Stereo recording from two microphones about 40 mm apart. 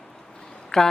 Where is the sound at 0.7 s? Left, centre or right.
Centre.